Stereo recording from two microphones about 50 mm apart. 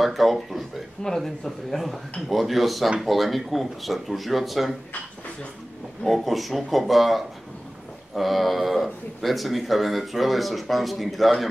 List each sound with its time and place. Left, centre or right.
0.0 s a man's voice: centre
1.0 s a man's voice: centre
6.0 s a man's voice: centre